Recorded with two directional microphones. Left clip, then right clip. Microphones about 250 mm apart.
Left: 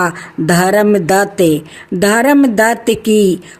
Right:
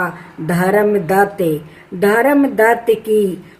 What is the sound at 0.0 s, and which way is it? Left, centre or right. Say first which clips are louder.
Speech: left 6 dB; left.